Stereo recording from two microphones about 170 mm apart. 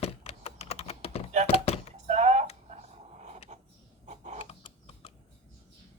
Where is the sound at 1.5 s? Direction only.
35° left (ahead or behind).